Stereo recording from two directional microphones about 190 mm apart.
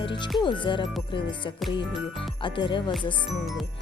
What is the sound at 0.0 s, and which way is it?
Music, 25° left (ahead or behind).